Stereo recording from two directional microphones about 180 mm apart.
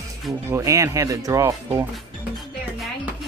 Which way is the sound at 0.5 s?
15° right (ahead or behind).